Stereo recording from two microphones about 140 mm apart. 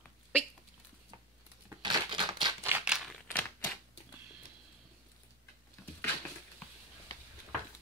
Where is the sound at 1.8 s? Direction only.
35° right (ahead or behind).